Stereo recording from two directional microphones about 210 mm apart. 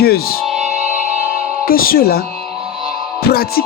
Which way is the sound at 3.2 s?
45° left (ahead or behind).